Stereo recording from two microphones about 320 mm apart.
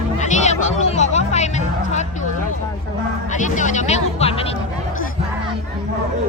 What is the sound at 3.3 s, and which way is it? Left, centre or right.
Speech, left.